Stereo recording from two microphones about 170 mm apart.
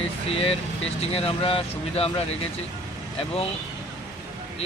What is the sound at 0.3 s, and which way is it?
Speech, 35° left (ahead or behind).